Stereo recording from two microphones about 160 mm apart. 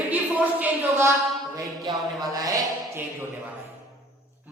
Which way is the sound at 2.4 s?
20° right (ahead or behind).